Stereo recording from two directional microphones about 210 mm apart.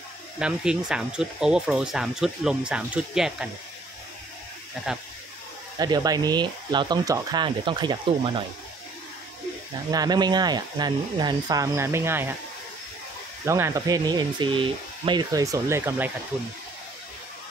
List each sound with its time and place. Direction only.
0.4 s speech: 5° right (ahead or behind)
4.9 s speech: 5° right (ahead or behind)
5.8 s speech: 20° right (ahead or behind)
9.8 s speech: 20° right (ahead or behind)
13.5 s speech: 15° right (ahead or behind)